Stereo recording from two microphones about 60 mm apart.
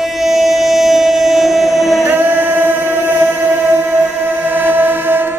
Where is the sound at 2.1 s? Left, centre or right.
Right.